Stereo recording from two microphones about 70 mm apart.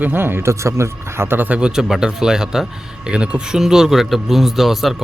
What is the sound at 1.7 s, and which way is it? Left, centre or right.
A man's voice, centre.